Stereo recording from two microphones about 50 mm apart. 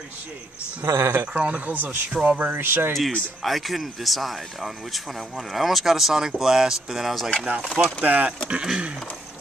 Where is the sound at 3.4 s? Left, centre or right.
Centre.